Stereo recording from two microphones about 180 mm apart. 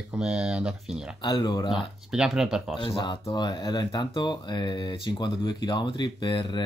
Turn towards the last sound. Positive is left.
turn(degrees=25)  # may be behind; listen again after turning